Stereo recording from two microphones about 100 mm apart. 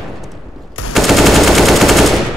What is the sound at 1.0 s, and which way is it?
Machine gun, centre (ahead or behind).